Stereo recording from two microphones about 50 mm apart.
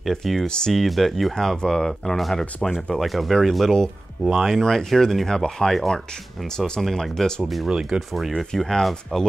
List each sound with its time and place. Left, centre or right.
0.1 s speech: centre
0.5 s speech: centre
0.7 s speech: centre
4.3 s speech: centre
7.4 s speech: centre